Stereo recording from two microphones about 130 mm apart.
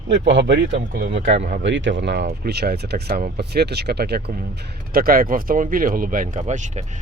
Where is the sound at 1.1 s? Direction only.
50° right (ahead or behind).